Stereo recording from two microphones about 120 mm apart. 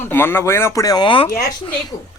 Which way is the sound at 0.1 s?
20° left (ahead or behind).